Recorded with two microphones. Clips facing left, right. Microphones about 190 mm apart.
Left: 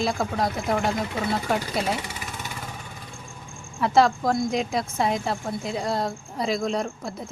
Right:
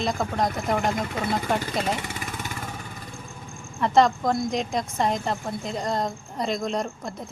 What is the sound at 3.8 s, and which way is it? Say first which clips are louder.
Speech: even; 5° left (ahead or behind).